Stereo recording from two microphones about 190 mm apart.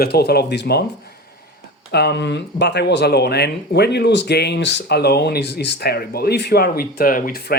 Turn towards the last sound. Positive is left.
turn(degrees=50)  # may be behind; listen again after turning